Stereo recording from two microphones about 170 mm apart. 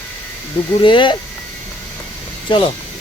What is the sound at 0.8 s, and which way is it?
Speech, 30° left (ahead or behind).